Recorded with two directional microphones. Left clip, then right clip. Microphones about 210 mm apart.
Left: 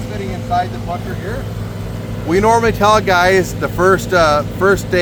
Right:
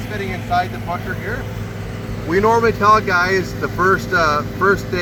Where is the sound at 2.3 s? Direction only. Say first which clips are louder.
Left 2 dB; 45° left (ahead or behind).